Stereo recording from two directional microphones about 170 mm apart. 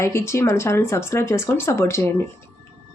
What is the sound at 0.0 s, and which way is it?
Speech, 15° left (ahead or behind).